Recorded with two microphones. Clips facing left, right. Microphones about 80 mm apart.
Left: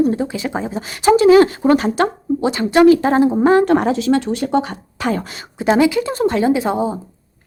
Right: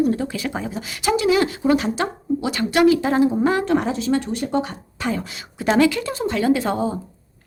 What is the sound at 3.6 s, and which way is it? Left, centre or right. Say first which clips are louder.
Speech: left 6 dB; left.